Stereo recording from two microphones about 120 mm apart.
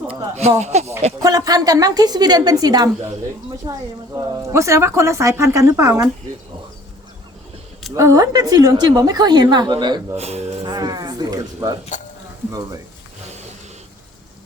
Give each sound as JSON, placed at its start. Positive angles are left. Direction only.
{"t": 0.6, "sound": "speech", "side_deg": -65}
{"t": 1.2, "sound": "a woman's voice", "side_deg": -30}
{"t": 7.9, "sound": "a woman's voice", "side_deg": -25}
{"t": 10.2, "sound": "speech", "side_deg": -60}
{"t": 10.7, "sound": "a sound", "side_deg": -35}
{"t": 12.5, "sound": "a woman's voice", "side_deg": -30}